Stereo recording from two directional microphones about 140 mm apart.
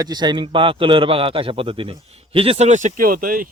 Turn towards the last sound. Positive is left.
turn(degrees=-90)